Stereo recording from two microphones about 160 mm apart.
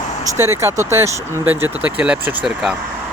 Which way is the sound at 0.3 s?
15° right (ahead or behind).